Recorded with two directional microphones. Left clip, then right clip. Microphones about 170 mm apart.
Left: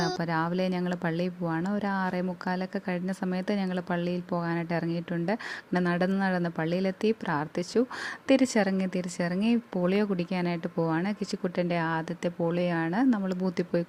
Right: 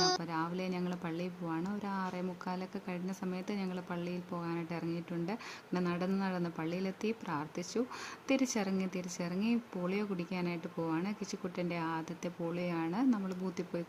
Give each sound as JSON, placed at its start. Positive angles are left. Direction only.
{"t": 0.2, "sound": "speech", "side_deg": 35}